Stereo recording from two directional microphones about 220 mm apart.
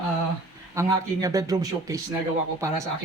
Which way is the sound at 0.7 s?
15° right (ahead or behind).